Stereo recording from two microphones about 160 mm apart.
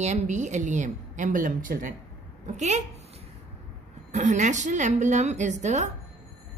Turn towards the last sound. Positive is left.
turn(degrees=-45)  # may be behind; listen again after turning